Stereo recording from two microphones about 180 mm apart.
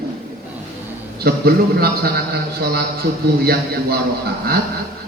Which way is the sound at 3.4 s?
60° right (ahead or behind).